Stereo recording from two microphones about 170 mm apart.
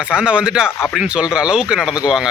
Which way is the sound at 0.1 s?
5° right (ahead or behind).